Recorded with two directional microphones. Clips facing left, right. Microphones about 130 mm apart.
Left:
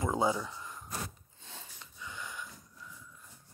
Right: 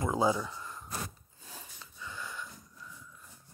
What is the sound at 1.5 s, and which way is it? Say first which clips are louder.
Wheeze: right 1 dB; 25° left (ahead or behind).